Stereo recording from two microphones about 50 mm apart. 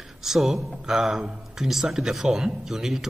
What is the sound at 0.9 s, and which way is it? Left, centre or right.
Speech, centre.